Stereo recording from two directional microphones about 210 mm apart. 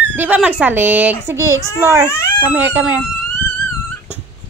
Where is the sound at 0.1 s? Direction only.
10° right (ahead or behind).